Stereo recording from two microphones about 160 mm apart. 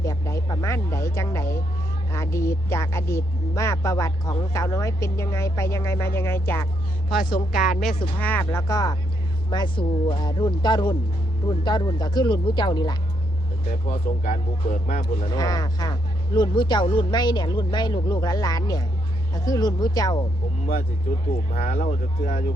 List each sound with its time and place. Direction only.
0.0 s speech: 20° left (ahead or behind)
7.5 s speech: 5° right (ahead or behind)
8.2 s speech: 10° left (ahead or behind); by 13.0 s 25° left (ahead or behind)
13.7 s speech: 55° left (ahead or behind)
15.0 s speech: 25° left (ahead or behind)
21.5 s speech: 60° left (ahead or behind)